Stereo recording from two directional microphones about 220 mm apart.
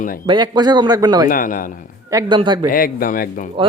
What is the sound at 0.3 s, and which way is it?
Cattle, 20° right (ahead or behind).